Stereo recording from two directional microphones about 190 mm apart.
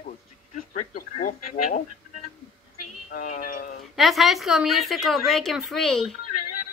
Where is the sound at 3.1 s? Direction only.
45° left (ahead or behind).